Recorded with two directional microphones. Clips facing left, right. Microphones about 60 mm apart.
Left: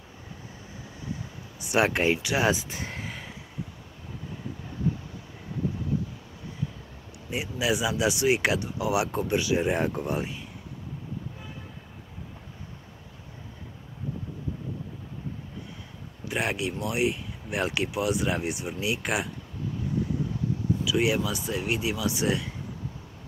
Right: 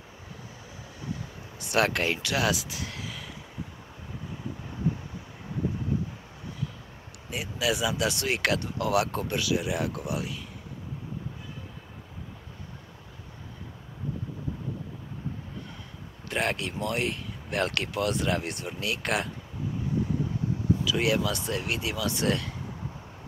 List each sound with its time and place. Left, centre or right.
1.6 s speech: centre; by 3.3 s left
7.2 s speech: left
16.3 s speech: centre
20.8 s speech: centre